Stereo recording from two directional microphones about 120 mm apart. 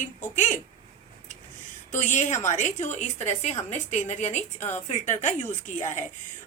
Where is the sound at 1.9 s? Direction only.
90° left.